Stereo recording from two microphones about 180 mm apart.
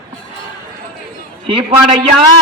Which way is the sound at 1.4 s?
30° right (ahead or behind).